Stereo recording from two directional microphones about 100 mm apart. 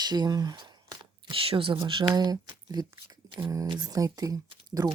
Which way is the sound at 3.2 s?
35° right (ahead or behind).